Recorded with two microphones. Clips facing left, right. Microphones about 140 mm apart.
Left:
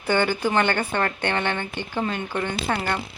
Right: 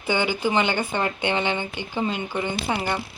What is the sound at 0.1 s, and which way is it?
A woman's voice, 10° right (ahead or behind).